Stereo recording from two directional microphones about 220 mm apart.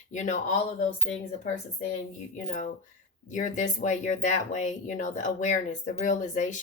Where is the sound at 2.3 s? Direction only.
35° left (ahead or behind).